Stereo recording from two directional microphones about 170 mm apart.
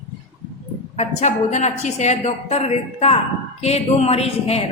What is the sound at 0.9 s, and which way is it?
A woman's voice, 40° left (ahead or behind).